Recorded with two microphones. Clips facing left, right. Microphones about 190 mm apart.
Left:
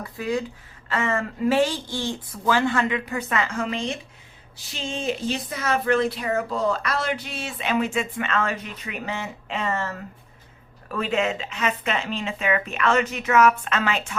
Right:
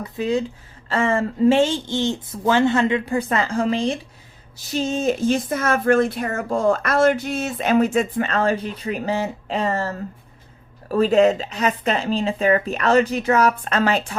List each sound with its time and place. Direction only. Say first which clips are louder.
0.0 s speech: right 5 dB; 20° right (ahead or behind)